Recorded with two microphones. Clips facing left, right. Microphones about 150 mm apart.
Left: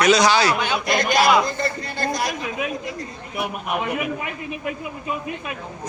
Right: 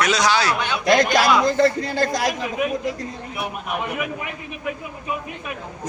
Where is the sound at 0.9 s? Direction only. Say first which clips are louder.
Right 2 dB; 90° right.